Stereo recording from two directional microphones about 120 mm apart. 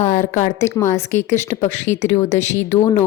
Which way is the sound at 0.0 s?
90° left.